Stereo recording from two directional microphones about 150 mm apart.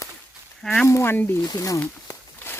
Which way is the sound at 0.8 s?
15° left (ahead or behind).